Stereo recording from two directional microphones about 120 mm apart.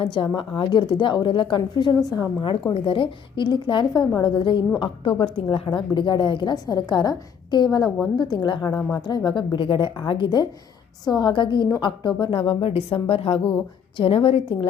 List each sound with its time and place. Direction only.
0.0 s a woman's voice: 45° left (ahead or behind)
2.7 s a woman's voice: 45° left (ahead or behind)